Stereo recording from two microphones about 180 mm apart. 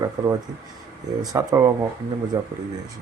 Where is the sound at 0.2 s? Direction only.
10° right (ahead or behind).